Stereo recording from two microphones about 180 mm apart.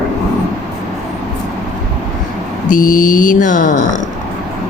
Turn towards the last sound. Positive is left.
turn(degrees=45)  # may be behind; listen again after turning